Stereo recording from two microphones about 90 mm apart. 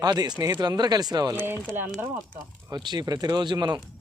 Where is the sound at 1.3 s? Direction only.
25° right (ahead or behind).